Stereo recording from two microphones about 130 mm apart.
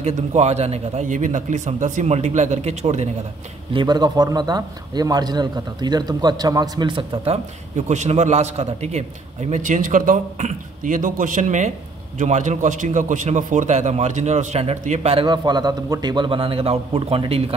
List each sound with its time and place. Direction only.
0.0 s a man's voice: 60° right (ahead or behind)
3.7 s a man's voice: 35° right (ahead or behind)
7.7 s a man's voice: 65° right (ahead or behind)
15.2 s a man's voice: 35° right (ahead or behind); by 17.6 s 50° right (ahead or behind)